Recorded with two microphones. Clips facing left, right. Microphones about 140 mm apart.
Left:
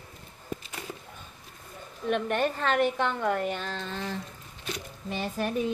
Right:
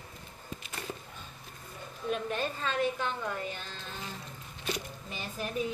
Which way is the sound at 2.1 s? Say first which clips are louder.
Left 6 dB; 65° left (ahead or behind).